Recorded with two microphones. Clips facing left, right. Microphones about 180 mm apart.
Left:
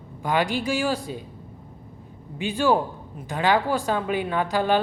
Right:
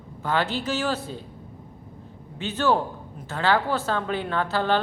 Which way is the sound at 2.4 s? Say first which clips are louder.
Left 2 dB; 10° left (ahead or behind).